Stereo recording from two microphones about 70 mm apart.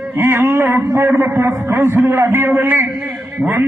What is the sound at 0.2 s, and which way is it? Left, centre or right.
A man's voice, right.